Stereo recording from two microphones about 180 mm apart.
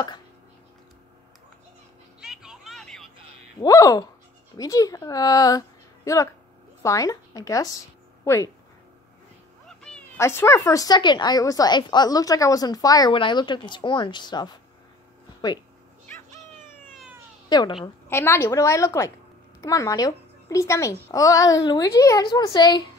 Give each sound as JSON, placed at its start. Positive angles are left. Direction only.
{"t": 2.1, "sound": "vehicle", "side_deg": -5}
{"t": 3.6, "sound": "a woman's voice", "side_deg": 20}
{"t": 9.7, "sound": "meow", "side_deg": 5}
{"t": 10.1, "sound": "a woman's voice", "side_deg": 15}
{"t": 17.5, "sound": "a woman's voice", "side_deg": 20}